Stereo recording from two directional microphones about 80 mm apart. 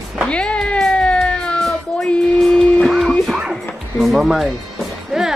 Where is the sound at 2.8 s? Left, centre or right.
Centre.